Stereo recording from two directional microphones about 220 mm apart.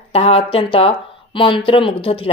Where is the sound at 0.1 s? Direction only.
25° left (ahead or behind).